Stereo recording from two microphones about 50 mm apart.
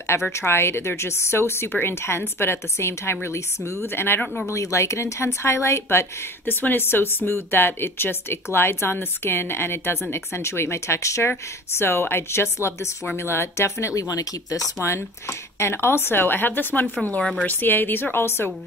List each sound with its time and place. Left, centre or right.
0.0 s speech: left
4.5 s a woman's voice: left
6.4 s speech: left
11.8 s speech: left
13.0 s speech: left
17.0 s speech: left
17.5 s speech: left